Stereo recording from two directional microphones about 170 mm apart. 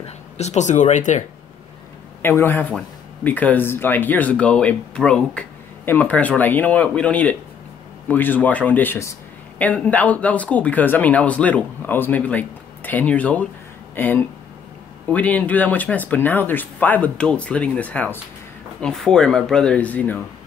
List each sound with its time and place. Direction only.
0.0 s speech: 40° left (ahead or behind)
2.2 s speech: 10° left (ahead or behind)